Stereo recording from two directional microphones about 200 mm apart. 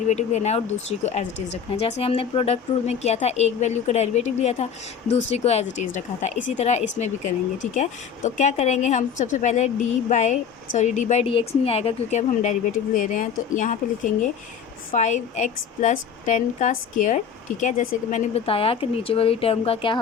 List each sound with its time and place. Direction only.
0.1 s speech: 35° left (ahead or behind)